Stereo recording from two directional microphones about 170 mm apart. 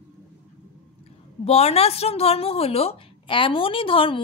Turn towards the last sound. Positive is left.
turn(degrees=30)  # may be behind; listen again after turning